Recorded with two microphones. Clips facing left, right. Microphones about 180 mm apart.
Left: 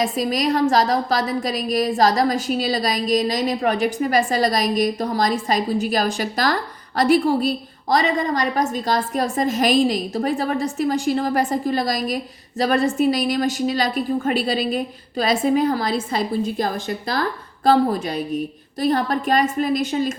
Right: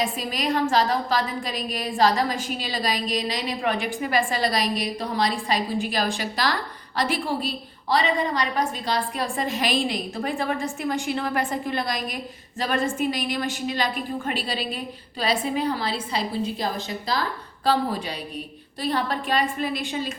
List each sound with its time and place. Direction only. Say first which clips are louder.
0.0 s a woman's voice: left 6 dB; 40° left (ahead or behind)